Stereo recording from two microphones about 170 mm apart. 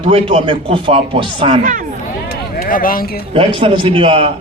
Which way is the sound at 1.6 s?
50° right (ahead or behind).